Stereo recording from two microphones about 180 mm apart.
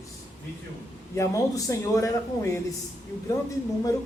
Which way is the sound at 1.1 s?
15° left (ahead or behind).